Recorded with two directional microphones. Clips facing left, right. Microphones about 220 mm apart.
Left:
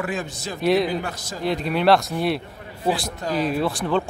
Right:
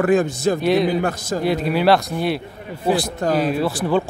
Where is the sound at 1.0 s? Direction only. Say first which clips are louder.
Right 9 dB; 50° right (ahead or behind).